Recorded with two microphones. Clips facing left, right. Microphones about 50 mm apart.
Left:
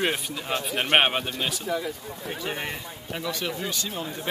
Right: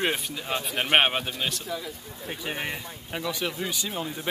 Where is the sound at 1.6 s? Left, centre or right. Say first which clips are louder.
Left 5 dB; left.